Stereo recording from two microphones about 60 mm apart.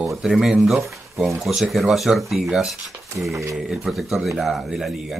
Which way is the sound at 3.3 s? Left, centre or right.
Right.